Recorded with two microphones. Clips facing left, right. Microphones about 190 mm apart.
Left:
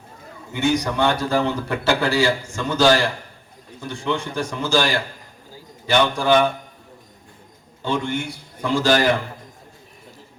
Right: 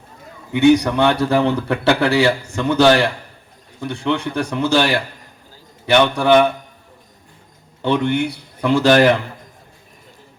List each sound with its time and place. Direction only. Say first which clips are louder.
0.5 s speech: right 8 dB; 60° right (ahead or behind)
7.8 s speech: right 6 dB; 65° right (ahead or behind)